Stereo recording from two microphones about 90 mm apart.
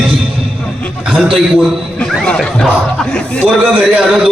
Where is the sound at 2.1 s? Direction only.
5° left (ahead or behind).